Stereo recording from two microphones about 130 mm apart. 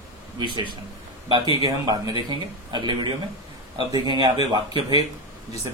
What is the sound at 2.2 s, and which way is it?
Speech, 35° right (ahead or behind).